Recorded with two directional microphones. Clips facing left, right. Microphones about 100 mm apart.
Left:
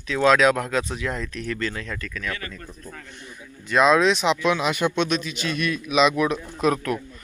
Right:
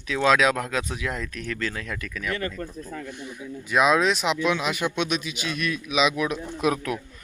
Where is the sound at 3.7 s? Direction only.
5° right (ahead or behind).